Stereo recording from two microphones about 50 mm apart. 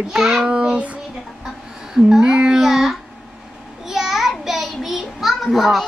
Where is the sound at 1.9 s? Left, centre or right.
Centre.